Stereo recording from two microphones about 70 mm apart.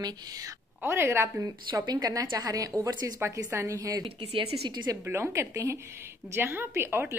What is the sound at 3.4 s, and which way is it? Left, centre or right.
A woman's voice, right.